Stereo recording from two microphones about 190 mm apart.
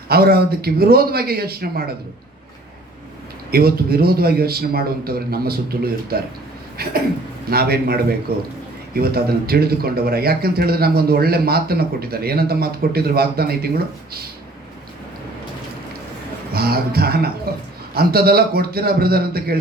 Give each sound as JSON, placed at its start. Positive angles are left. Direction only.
{"t": 0.1, "sound": "speech", "side_deg": -55}
{"t": 3.5, "sound": "speech", "side_deg": -55}
{"t": 7.5, "sound": "speech", "side_deg": -55}
{"t": 16.5, "sound": "speech", "side_deg": -55}